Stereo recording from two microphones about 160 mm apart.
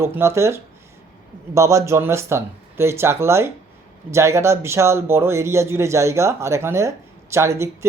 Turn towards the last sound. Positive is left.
turn(degrees=-15)  # may be behind; listen again after turning